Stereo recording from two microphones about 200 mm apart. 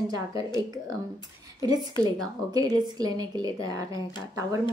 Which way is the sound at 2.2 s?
20° right (ahead or behind).